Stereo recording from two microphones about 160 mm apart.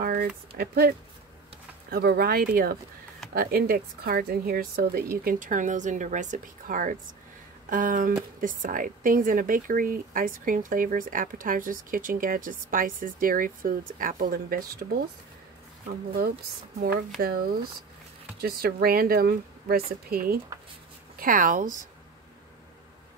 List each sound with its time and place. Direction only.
0.0 s a sound: 70° right (ahead or behind)
0.6 s speech: 70° right (ahead or behind)
5.2 s speech: 55° right (ahead or behind)
16.1 s speech: 70° right (ahead or behind)
21.2 s speech: 55° right (ahead or behind)